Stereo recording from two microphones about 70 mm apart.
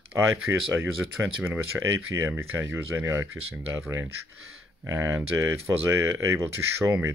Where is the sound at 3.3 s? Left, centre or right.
Right.